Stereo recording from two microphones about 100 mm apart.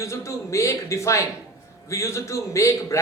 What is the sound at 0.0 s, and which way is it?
A man's voice, 30° left (ahead or behind).